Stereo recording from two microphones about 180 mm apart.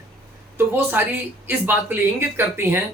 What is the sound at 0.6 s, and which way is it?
Speech, 10° right (ahead or behind).